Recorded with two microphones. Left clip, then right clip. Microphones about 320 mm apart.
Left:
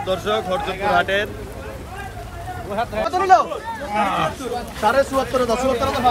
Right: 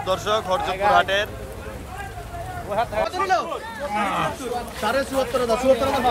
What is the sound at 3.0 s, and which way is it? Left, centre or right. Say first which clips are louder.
Speech: left 7 dB; centre.